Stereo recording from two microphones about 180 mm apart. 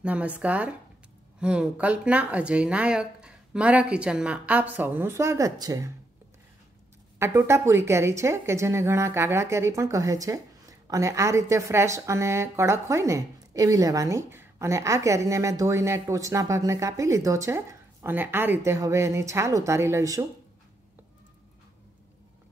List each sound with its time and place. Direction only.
0.0 s a woman's voice: 5° right (ahead or behind)
7.2 s a woman's voice: 15° right (ahead or behind)